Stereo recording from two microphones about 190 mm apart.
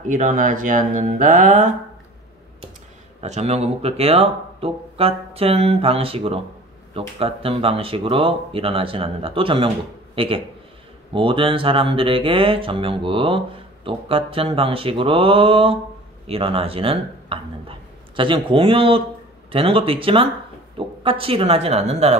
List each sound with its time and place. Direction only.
0.1 s speech: 40° right (ahead or behind)
3.2 s a man's voice: 35° right (ahead or behind)